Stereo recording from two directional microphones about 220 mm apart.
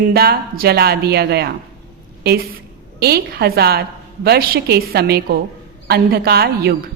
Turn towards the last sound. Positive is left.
turn(degrees=-45)  # may be behind; listen again after turning